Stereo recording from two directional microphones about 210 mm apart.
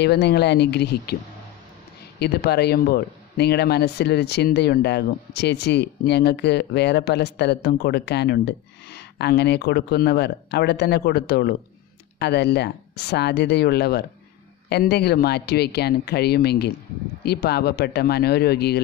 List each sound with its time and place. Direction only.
0.0 s a man's voice: 50° left (ahead or behind)
2.1 s a man's voice: 50° left (ahead or behind)